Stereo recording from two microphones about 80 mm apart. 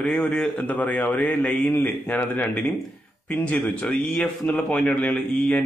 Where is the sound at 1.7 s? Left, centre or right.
Left.